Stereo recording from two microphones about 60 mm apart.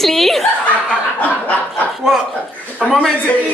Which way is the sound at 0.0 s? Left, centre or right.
Centre.